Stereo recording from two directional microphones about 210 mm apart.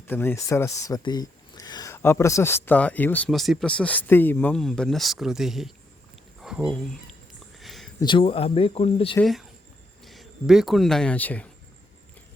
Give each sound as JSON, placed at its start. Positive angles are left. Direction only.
{"t": 0.1, "sound": "speech", "side_deg": 10}
{"t": 7.6, "sound": "a sound", "side_deg": 0}
{"t": 7.9, "sound": "speech", "side_deg": 20}
{"t": 9.1, "sound": "speech", "side_deg": 0}